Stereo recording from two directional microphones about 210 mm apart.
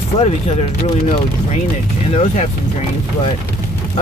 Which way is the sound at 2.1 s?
30° left (ahead or behind).